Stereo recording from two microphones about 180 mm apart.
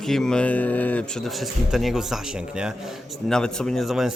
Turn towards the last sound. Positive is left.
turn(degrees=0)  # may be behind; listen again after turning